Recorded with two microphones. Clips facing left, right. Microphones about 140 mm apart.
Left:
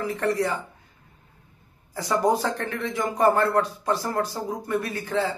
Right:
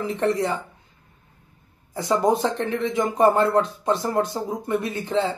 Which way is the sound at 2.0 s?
20° right (ahead or behind).